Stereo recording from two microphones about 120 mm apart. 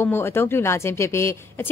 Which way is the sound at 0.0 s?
20° left (ahead or behind).